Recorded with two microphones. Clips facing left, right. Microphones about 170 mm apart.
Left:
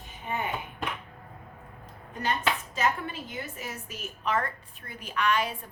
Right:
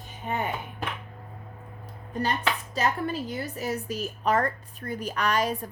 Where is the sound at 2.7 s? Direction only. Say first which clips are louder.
Right 2 dB; 35° right (ahead or behind).